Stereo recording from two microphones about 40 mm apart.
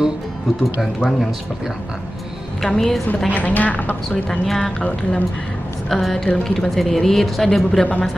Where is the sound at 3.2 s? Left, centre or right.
Left.